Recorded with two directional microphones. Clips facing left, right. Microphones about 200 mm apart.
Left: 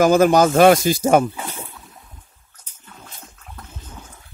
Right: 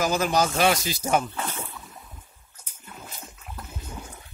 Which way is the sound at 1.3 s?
15° left (ahead or behind).